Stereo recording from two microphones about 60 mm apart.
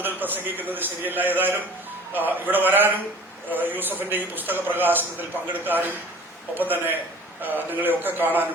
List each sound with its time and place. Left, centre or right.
0.0 s a man's voice: right